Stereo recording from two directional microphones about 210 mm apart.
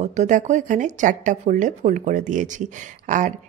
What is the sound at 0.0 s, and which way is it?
Speech, 35° right (ahead or behind).